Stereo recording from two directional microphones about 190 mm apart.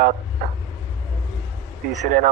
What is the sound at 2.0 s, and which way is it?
Speech, 40° right (ahead or behind).